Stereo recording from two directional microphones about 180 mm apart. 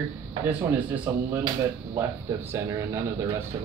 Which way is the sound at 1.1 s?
10° right (ahead or behind).